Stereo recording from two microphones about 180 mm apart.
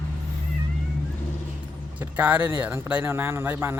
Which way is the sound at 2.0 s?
10° right (ahead or behind).